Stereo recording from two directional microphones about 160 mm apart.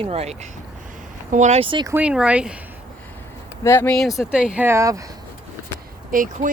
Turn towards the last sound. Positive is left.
turn(degrees=-55)  # may be behind; listen again after turning